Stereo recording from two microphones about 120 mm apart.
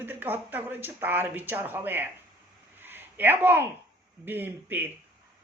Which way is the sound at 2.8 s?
15° right (ahead or behind).